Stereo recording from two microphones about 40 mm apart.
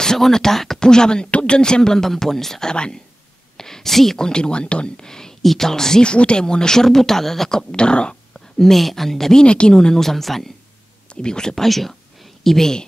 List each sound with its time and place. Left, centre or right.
0.0 s speech: centre
0.8 s a woman's voice: centre
4.3 s speech: left
6.0 s speech: left; by 7.6 s centre
7.7 s speech: left
8.3 s speech: centre
9.4 s speech: left
9.8 s speech: centre
11.2 s speech: centre
11.5 s speech: centre